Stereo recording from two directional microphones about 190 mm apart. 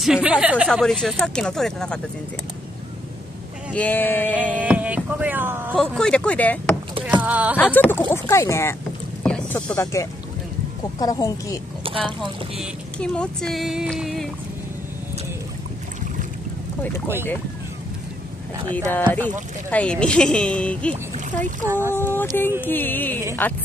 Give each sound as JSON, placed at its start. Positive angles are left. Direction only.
{"t": 0.0, "sound": "speech", "side_deg": -5}
{"t": 3.7, "sound": "speech", "side_deg": 10}
{"t": 4.4, "sound": "speech", "side_deg": -5}
{"t": 5.8, "sound": "speech", "side_deg": 5}
{"t": 7.2, "sound": "speech", "side_deg": -5}
{"t": 7.5, "sound": "speech", "side_deg": 10}
{"t": 9.2, "sound": "boat", "side_deg": 5}
{"t": 11.0, "sound": "a woman's voice", "side_deg": 20}
{"t": 12.5, "sound": "speech", "side_deg": 5}
{"t": 18.7, "sound": "speech", "side_deg": 10}
{"t": 20.9, "sound": "speech", "side_deg": -40}
{"t": 21.9, "sound": "speech", "side_deg": 10}